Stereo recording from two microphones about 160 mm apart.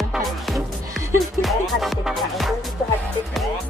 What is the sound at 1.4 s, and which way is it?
Speech, centre (ahead or behind).